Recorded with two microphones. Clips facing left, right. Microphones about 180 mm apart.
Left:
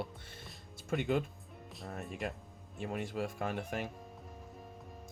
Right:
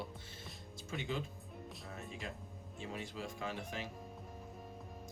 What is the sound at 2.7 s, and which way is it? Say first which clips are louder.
Speech: left 7 dB; 60° left (ahead or behind).